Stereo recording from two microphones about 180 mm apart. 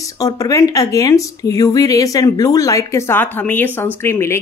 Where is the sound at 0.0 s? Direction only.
20° left (ahead or behind).